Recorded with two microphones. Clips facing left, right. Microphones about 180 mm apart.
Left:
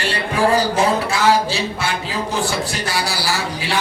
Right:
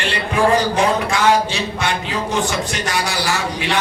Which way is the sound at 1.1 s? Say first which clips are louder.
Even; 35° left (ahead or behind).